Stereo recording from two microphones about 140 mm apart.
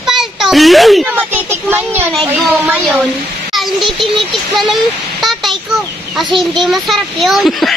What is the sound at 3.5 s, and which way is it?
A child's voice, centre (ahead or behind).